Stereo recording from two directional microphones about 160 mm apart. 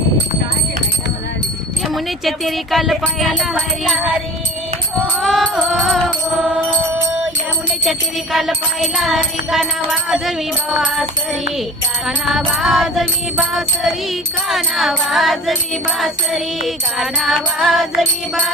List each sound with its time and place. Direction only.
1.9 s music: centre (ahead or behind)
5.2 s music: centre (ahead or behind)
7.9 s music: centre (ahead or behind)
12.0 s music: centre (ahead or behind)